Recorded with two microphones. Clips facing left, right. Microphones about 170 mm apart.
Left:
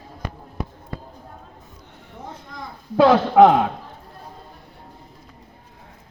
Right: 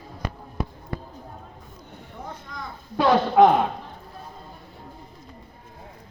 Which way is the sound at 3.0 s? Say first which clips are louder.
Left 4 dB; 85° left.